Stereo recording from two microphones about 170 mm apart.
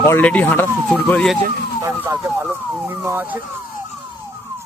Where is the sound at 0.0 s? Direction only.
10° left (ahead or behind).